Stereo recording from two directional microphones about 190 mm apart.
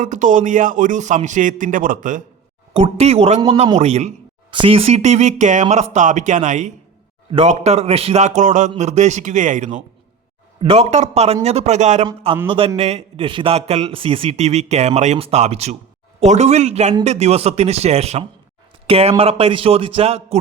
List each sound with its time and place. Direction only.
0.0 s speech: 40° right (ahead or behind)
2.7 s a man's voice: 30° right (ahead or behind)
12.0 s a man's voice: 25° right (ahead or behind)